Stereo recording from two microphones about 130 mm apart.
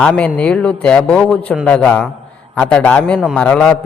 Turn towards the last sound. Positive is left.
turn(degrees=5)  # may be behind; listen again after turning